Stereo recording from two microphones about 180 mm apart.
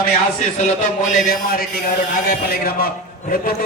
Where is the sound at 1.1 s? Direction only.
55° left (ahead or behind).